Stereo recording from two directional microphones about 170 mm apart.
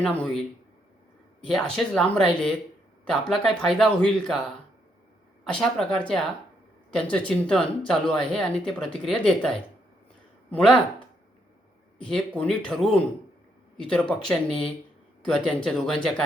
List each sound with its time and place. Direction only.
0.0 s a man's voice: 5° left (ahead or behind)
1.5 s speech: centre (ahead or behind)
5.5 s speech: 5° left (ahead or behind)
12.0 s speech: 5° left (ahead or behind)